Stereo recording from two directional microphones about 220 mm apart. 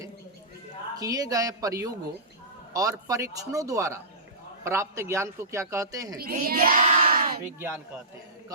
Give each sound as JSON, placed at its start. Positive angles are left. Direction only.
{"t": 0.9, "sound": "a man's voice", "side_deg": -15}
{"t": 6.1, "sound": "a sound", "side_deg": -40}
{"t": 7.6, "sound": "a man's voice", "side_deg": -10}